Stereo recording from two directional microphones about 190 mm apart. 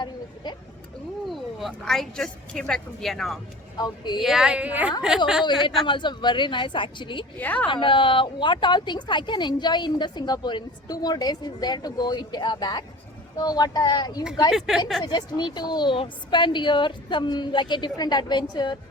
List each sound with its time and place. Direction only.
1.3 s a woman's voice: centre (ahead or behind)
3.8 s speech: 20° left (ahead or behind)
4.2 s a woman's voice: centre (ahead or behind)
5.8 s speech: 25° left (ahead or behind)
7.3 s a woman's voice: 10° left (ahead or behind)
7.7 s speech: 25° left (ahead or behind)
14.7 s a woman's voice: centre (ahead or behind)
15.0 s speech: 25° left (ahead or behind)